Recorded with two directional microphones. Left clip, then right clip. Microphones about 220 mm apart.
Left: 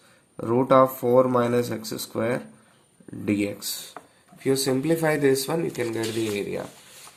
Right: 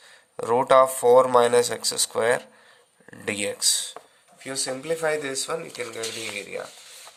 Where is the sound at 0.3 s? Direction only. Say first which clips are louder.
Right 1 dB; 45° right (ahead or behind).